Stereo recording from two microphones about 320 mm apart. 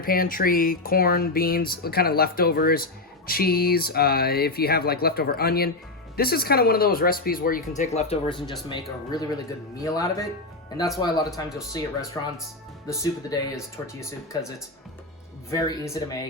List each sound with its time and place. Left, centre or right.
0.0 s speech: left; by 13.5 s centre
15.4 s speech: centre